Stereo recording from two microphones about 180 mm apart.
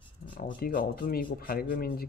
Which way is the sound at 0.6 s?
55° left (ahead or behind).